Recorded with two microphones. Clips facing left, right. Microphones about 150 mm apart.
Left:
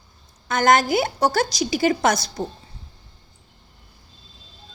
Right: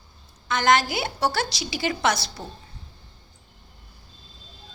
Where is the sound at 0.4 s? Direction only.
45° left (ahead or behind).